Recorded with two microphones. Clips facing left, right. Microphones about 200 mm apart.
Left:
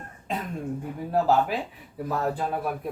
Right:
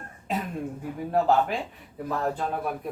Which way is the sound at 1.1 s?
Centre (ahead or behind).